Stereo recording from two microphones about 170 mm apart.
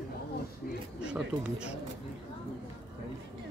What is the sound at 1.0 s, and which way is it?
Speech, 5° right (ahead or behind).